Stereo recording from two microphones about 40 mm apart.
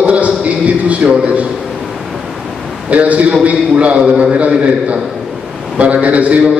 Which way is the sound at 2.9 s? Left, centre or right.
Right.